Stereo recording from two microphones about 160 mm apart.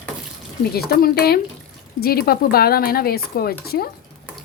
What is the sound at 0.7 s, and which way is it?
Speech, 75° left (ahead or behind).